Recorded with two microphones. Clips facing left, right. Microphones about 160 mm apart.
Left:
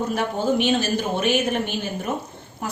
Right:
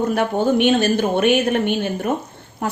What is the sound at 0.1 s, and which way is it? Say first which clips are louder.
A woman's voice: right 4 dB; 60° right (ahead or behind).